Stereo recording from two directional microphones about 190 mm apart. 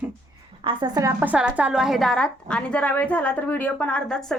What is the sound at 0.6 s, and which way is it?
Speech, 25° right (ahead or behind).